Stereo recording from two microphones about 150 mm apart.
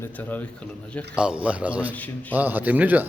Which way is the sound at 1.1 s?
5° right (ahead or behind).